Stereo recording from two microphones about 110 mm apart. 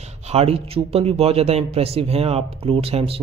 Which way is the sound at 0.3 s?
70° right (ahead or behind).